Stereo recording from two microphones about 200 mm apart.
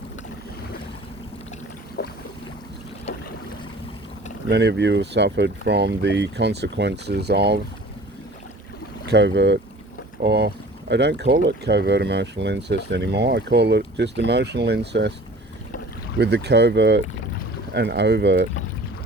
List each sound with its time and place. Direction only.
2.0 s boat: 55° left (ahead or behind)
4.4 s speech: 55° right (ahead or behind)
9.0 s speech: 60° right (ahead or behind)
16.1 s speech: 55° right (ahead or behind)